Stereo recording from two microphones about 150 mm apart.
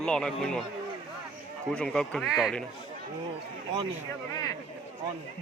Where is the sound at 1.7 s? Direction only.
5° left (ahead or behind).